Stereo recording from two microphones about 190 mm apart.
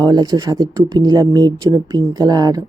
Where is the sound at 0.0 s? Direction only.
20° right (ahead or behind).